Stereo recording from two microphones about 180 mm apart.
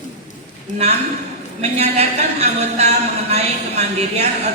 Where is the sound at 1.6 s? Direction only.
35° right (ahead or behind).